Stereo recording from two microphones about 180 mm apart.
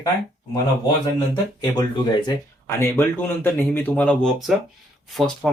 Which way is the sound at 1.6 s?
20° left (ahead or behind).